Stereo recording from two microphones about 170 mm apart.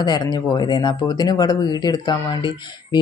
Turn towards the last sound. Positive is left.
turn(degrees=25)  # may be behind; listen again after turning